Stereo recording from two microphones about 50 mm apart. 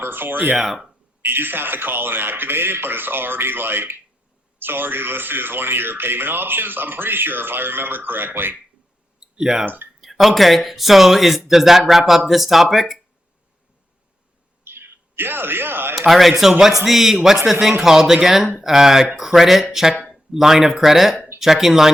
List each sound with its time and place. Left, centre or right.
0.0 s speech: right
0.5 s speech: centre
1.2 s speech: right
9.4 s a man's voice: centre
9.6 s speech: right
10.0 s speech: centre
14.6 s bird: right
16.0 s a man's voice: centre